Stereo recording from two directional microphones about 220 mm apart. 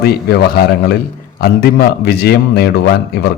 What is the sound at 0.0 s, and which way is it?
A man's voice, 45° left (ahead or behind).